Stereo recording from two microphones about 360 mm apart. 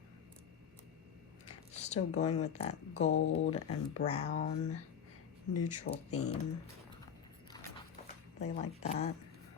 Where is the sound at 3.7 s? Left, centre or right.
Centre.